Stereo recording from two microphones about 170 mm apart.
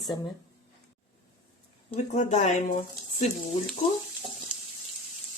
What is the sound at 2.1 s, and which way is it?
Speech, 45° left (ahead or behind).